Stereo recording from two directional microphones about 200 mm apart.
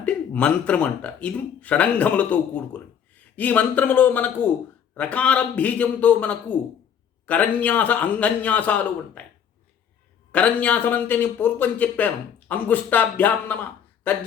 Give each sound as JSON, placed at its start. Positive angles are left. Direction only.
{"t": 0.0, "sound": "a man's voice", "side_deg": 5}
{"t": 10.3, "sound": "a man's voice", "side_deg": 5}